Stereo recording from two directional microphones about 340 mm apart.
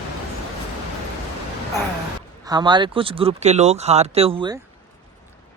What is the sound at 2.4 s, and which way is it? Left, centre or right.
Speech, centre.